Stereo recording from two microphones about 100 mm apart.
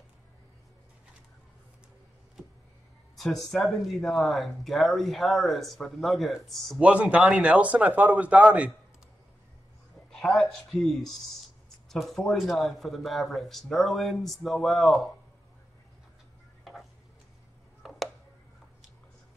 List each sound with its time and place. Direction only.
3.3 s speech: 5° left (ahead or behind)
6.8 s speech: 10° right (ahead or behind)
10.1 s speech: centre (ahead or behind)
16.7 s tick-tock: centre (ahead or behind)
17.8 s a sound: centre (ahead or behind)